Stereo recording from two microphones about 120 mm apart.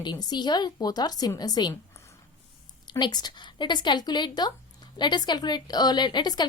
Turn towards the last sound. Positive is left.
turn(degrees=35)  # may be behind; listen again after turning